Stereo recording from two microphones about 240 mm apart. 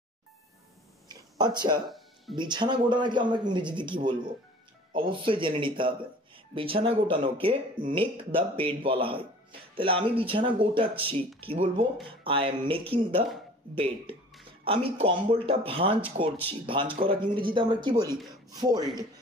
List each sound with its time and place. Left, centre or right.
1.0 s a sound: centre
1.9 s music: centre
2.3 s speech: centre